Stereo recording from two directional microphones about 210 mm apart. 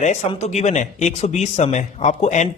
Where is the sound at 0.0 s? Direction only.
30° left (ahead or behind).